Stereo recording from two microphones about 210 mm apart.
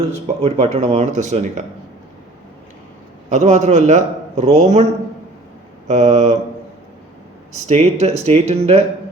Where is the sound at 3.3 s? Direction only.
35° right (ahead or behind).